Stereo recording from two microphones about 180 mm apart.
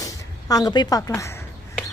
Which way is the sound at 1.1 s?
10° left (ahead or behind).